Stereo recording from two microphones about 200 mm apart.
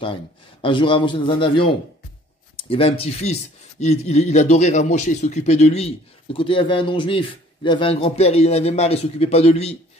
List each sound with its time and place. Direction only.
0.6 s a man's voice: 25° left (ahead or behind)